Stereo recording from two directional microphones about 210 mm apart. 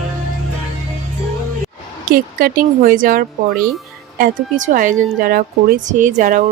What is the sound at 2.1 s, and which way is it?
A woman's voice, 45° right (ahead or behind).